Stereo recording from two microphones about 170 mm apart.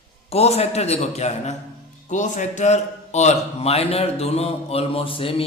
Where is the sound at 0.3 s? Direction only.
35° left (ahead or behind).